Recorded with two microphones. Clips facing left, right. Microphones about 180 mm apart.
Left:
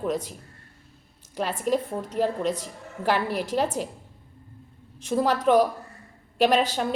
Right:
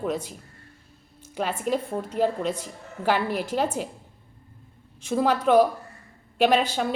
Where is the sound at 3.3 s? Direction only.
40° left (ahead or behind).